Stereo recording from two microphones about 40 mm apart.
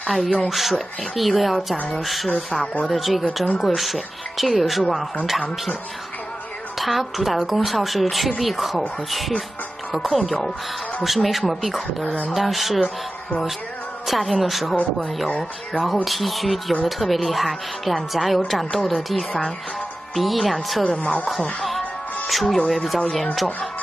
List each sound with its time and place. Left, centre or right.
0.0 s a woman's voice: centre
6.8 s a woman's voice: centre
9.9 s a woman's voice: centre
14.0 s a woman's voice: centre
15.2 s speech: left
15.8 s a woman's voice: centre
21.0 s speech: left
21.4 s speech: centre
22.3 s a woman's voice: centre